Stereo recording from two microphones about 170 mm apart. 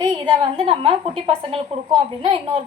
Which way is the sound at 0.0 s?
25° right (ahead or behind).